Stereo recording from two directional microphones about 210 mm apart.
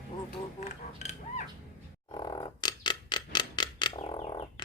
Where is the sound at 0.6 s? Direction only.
35° left (ahead or behind).